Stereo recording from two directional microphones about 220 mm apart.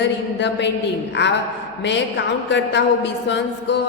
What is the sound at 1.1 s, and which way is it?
Speech, 50° left (ahead or behind).